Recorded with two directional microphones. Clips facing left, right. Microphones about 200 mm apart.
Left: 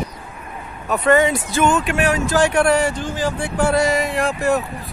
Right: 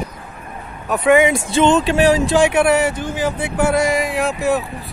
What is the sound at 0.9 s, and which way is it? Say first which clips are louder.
Speech: right 2 dB; 5° right (ahead or behind).